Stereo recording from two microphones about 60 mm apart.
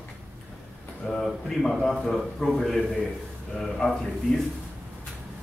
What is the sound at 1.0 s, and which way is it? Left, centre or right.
A man's voice, centre.